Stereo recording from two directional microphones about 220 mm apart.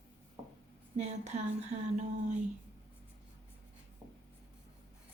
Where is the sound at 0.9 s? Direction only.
30° right (ahead or behind).